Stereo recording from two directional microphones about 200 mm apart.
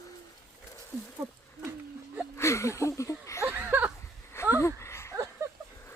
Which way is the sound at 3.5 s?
10° right (ahead or behind).